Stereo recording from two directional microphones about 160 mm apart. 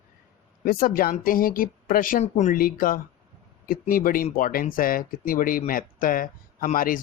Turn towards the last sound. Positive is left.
turn(degrees=60)  # may be behind; listen again after turning